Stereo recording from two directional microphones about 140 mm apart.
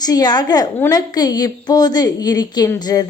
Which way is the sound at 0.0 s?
30° left (ahead or behind).